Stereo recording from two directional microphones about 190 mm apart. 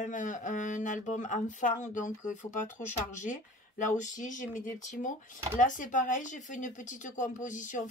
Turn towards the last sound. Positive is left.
turn(degrees=40)  # may be behind; listen again after turning